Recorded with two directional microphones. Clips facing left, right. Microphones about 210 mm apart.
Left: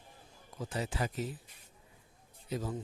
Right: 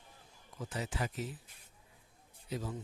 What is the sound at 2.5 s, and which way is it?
Speech, 45° left (ahead or behind).